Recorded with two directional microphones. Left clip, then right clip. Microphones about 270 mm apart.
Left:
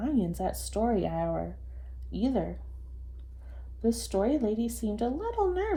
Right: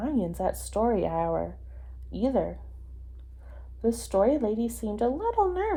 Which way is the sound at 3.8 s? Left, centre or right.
Right.